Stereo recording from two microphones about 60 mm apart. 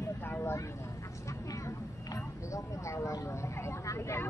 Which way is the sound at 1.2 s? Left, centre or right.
Left.